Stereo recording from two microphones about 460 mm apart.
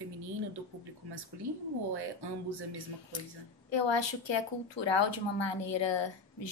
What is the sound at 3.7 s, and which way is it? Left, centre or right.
A woman's voice, left.